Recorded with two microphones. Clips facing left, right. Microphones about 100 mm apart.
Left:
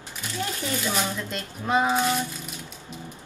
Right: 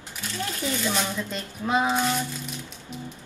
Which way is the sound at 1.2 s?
Centre (ahead or behind).